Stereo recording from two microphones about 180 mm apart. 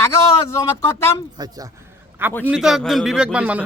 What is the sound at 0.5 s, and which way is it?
Speech, 15° left (ahead or behind).